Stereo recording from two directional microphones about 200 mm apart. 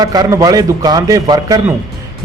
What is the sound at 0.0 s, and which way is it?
Speech, 20° right (ahead or behind).